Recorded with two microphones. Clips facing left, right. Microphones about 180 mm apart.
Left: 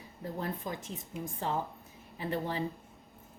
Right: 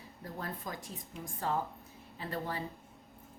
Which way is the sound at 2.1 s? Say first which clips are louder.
Left 4 dB; 20° left (ahead or behind).